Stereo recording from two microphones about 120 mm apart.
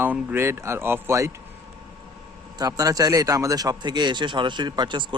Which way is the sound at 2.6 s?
30° right (ahead or behind).